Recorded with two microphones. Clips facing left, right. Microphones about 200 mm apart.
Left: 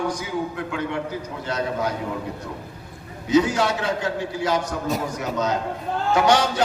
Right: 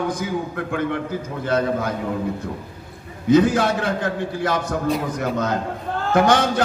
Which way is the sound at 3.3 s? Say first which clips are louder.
Right 3 dB; 55° right (ahead or behind).